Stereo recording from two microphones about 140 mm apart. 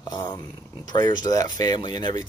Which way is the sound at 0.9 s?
30° left (ahead or behind).